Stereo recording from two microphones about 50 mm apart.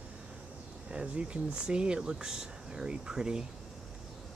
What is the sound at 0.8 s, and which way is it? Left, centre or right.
Speech, right.